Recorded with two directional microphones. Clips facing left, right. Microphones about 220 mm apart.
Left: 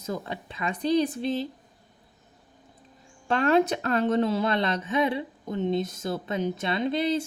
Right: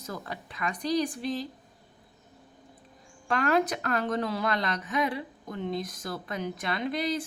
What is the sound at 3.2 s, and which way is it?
Speech, 25° left (ahead or behind).